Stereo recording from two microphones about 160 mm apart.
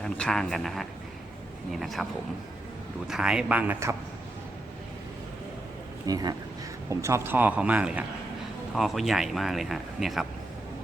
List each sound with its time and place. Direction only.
0.0 s speech: 5° left (ahead or behind)
3.1 s speech: 5° right (ahead or behind)
6.1 s speech: 25° right (ahead or behind); by 10.2 s centre (ahead or behind)